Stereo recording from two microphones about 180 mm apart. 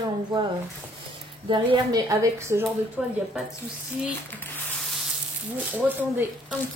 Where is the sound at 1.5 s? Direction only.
25° right (ahead or behind).